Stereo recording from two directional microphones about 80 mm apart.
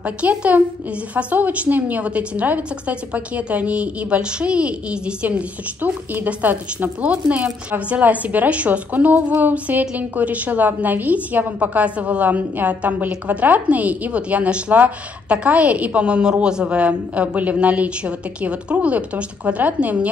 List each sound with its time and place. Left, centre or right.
0.0 s a woman's voice: centre